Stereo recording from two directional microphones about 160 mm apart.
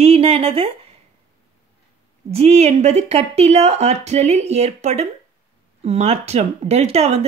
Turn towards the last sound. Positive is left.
turn(degrees=-40)  # may be behind; listen again after turning